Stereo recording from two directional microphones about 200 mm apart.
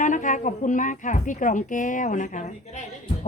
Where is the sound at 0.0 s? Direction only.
40° left (ahead or behind).